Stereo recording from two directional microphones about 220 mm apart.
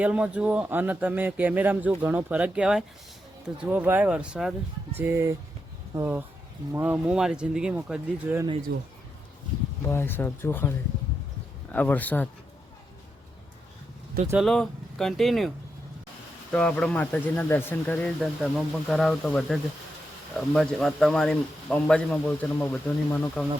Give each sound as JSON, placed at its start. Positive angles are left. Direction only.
{"t": 0.0, "sound": "speech", "side_deg": -5}
{"t": 8.7, "sound": "speech", "side_deg": -45}
{"t": 9.8, "sound": "speech", "side_deg": 10}
{"t": 14.3, "sound": "speech", "side_deg": 0}